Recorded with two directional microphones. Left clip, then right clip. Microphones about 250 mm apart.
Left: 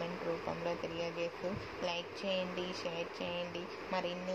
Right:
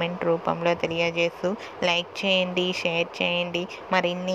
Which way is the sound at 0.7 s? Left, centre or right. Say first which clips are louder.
Right 17 dB; right.